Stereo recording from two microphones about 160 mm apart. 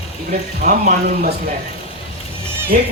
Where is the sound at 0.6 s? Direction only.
70° right (ahead or behind).